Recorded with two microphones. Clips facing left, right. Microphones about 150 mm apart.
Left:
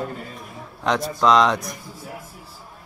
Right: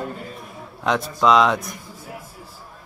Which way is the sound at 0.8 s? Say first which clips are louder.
Even; centre (ahead or behind).